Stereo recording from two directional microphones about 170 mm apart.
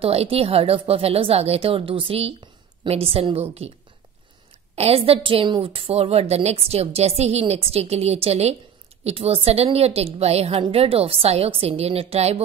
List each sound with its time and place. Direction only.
0.0 s a woman's voice: 35° right (ahead or behind)
4.7 s a woman's voice: 35° right (ahead or behind)